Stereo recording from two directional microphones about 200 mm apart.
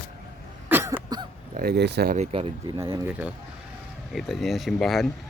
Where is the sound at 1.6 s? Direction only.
55° right (ahead or behind).